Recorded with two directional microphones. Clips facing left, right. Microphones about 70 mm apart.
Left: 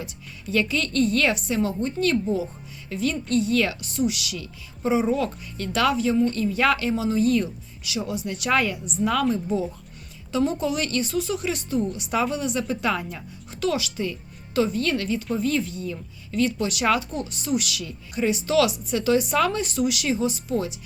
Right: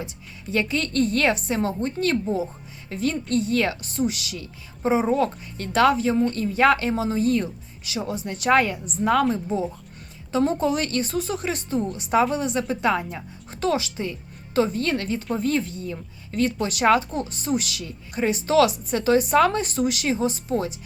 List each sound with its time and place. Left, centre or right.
0.0 s a woman's voice: right